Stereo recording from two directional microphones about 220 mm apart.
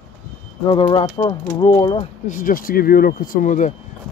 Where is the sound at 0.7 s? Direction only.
20° left (ahead or behind).